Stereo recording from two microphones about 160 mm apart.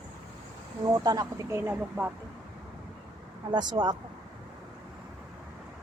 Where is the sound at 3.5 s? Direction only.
25° right (ahead or behind).